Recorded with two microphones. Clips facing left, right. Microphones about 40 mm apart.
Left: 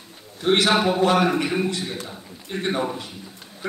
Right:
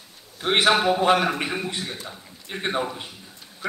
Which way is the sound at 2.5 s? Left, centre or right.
Centre.